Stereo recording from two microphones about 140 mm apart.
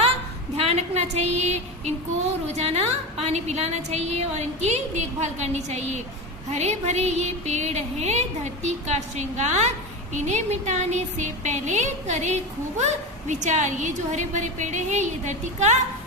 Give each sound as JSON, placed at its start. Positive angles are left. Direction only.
{"t": 0.5, "sound": "a woman's voice", "side_deg": -50}